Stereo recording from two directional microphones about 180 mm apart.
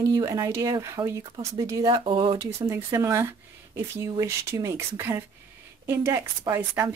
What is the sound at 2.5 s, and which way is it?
Speech, 15° right (ahead or behind).